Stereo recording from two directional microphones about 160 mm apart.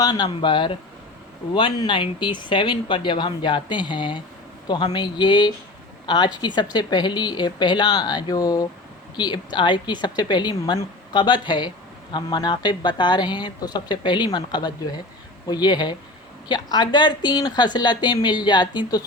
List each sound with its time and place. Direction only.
0.0 s speech: 25° left (ahead or behind)